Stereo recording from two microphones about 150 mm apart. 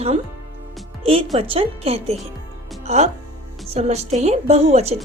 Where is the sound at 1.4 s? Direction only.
40° right (ahead or behind).